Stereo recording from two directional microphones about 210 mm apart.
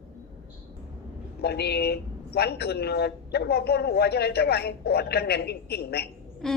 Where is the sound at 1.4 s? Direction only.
50° left (ahead or behind).